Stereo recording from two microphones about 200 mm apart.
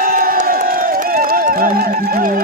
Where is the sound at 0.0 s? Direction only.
45° right (ahead or behind).